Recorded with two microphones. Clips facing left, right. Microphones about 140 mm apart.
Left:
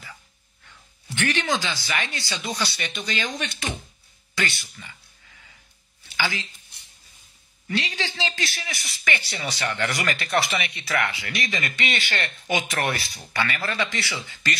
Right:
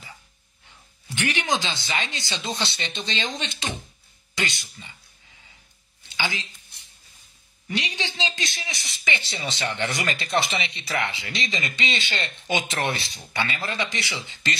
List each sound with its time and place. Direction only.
1.1 s a man's voice: 15° right (ahead or behind)
6.0 s a sound: 20° right (ahead or behind)
7.6 s a man's voice: 15° right (ahead or behind)